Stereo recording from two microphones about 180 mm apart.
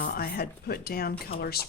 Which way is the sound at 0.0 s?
60° left (ahead or behind).